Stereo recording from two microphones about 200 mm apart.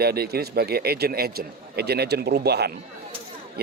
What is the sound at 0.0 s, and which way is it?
A man's voice, 50° right (ahead or behind).